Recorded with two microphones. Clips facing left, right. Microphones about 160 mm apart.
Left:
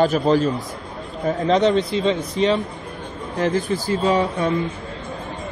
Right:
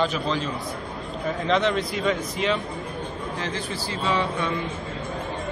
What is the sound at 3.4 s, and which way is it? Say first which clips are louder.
A man's voice: left 14 dB; 45° left (ahead or behind).